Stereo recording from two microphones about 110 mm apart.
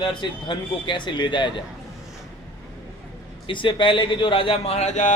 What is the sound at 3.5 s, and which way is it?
A man's voice, 50° left (ahead or behind).